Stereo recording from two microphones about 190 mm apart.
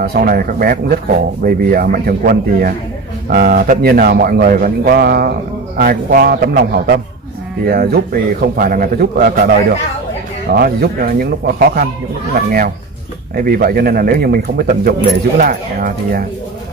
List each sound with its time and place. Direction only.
0.0 s speech: 50° right (ahead or behind)
10.5 s speech: 55° right (ahead or behind)